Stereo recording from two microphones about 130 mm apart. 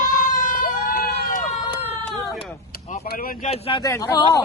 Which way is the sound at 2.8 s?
80° left.